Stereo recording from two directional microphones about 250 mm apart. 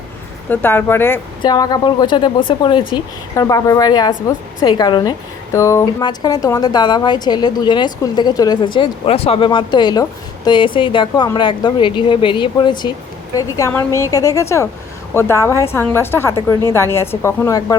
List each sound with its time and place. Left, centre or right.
0.5 s a woman's voice: centre